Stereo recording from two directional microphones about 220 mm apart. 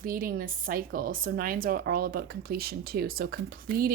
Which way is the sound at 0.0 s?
40° right (ahead or behind).